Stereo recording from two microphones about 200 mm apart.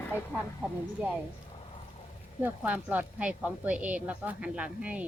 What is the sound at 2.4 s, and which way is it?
Speech, 10° right (ahead or behind).